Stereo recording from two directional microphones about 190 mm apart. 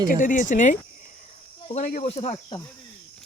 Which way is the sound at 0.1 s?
45° left (ahead or behind).